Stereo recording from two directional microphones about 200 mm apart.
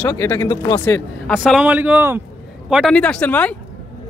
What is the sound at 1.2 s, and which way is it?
Speech, 5° right (ahead or behind).